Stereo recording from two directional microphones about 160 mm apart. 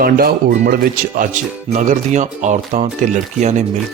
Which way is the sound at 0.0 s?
70° right (ahead or behind).